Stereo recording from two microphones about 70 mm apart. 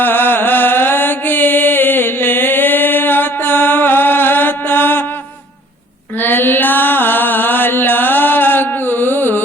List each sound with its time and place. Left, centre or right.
0.0 s mantra: left
6.1 s mantra: left